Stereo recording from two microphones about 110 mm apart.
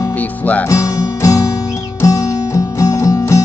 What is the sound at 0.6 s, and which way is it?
Music, 30° left (ahead or behind).